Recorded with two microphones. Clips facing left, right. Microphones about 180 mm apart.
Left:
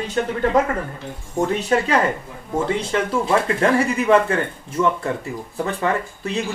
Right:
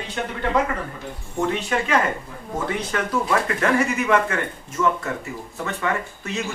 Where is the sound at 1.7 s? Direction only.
40° left (ahead or behind).